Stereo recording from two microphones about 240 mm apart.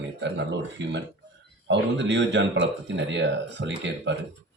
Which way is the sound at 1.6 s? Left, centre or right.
Right.